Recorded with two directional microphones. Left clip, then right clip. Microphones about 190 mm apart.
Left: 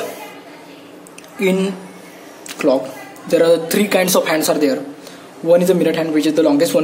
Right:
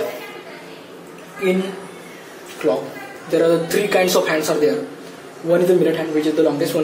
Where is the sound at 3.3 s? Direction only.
45° left (ahead or behind).